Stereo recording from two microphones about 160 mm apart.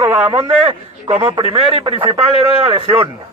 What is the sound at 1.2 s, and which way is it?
A man's voice, 35° right (ahead or behind).